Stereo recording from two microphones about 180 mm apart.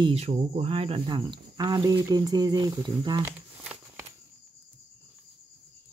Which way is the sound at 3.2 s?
5° right (ahead or behind).